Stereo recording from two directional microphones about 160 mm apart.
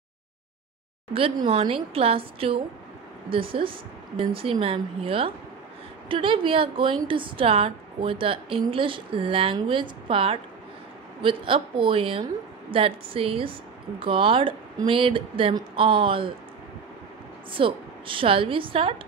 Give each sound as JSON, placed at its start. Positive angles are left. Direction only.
{"t": 1.1, "sound": "a woman's voice", "side_deg": -35}
{"t": 17.5, "sound": "a woman's voice", "side_deg": -35}